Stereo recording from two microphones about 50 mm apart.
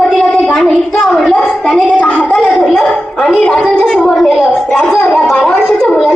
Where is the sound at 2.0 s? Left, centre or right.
Left.